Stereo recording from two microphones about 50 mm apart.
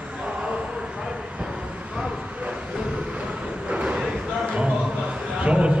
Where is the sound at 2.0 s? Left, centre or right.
Right.